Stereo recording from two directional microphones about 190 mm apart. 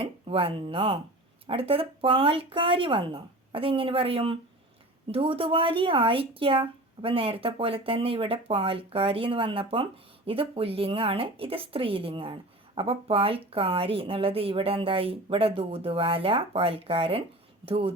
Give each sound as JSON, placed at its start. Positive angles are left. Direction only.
{"t": 0.0, "sound": "speech", "side_deg": -30}